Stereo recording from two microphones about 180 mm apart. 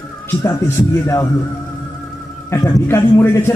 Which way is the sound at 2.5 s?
15° left (ahead or behind).